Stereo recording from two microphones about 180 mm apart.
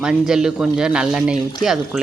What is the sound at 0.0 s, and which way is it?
Speech, 5° right (ahead or behind).